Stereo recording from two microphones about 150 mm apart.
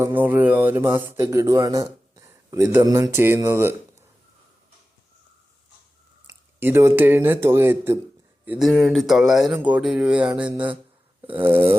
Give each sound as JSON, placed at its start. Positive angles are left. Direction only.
{"t": 0.0, "sound": "a man's voice", "side_deg": -15}
{"t": 6.2, "sound": "speech", "side_deg": -15}
{"t": 8.4, "sound": "speech", "side_deg": -5}